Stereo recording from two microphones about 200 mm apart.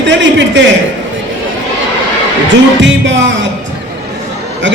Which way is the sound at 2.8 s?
65° right (ahead or behind).